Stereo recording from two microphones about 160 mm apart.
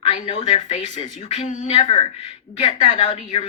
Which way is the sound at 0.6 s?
50° left (ahead or behind).